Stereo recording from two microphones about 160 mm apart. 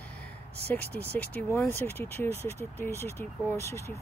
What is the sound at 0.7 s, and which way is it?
Speech, 10° left (ahead or behind).